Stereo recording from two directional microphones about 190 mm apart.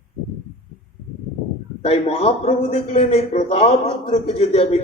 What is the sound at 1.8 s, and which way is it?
A man's voice, 30° left (ahead or behind).